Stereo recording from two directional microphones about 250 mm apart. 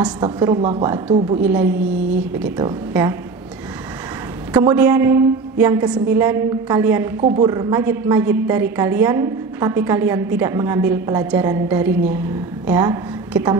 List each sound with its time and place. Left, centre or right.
0.0 s a woman's voice: centre
1.4 s a woman's voice: centre
4.6 s a woman's voice: centre
7.2 s a woman's voice: right